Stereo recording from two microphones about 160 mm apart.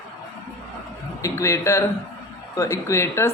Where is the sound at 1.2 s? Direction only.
20° left (ahead or behind).